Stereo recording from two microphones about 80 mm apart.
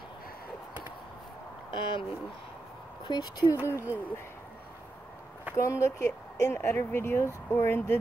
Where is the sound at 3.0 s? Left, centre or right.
Left.